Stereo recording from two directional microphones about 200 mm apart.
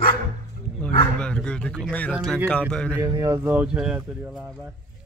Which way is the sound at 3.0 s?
15° right (ahead or behind).